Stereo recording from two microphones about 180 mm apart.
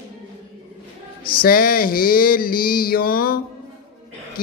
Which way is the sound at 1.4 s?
55° left (ahead or behind).